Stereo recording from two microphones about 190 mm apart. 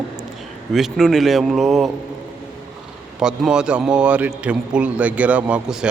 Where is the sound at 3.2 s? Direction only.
5° right (ahead or behind).